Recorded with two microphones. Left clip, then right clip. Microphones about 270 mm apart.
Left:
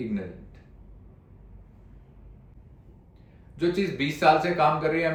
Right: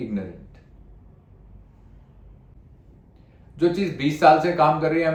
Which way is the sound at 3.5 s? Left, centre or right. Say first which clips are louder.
Right 4 dB; centre.